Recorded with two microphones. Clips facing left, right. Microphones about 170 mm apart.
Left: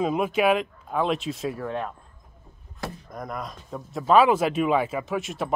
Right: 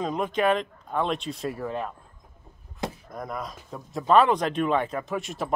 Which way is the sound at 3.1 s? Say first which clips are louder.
Even; centre (ahead or behind).